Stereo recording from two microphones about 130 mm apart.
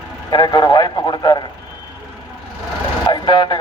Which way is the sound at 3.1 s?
40° left (ahead or behind).